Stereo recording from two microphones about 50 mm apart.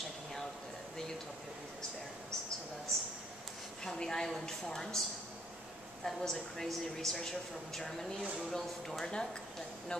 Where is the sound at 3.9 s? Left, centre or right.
Centre.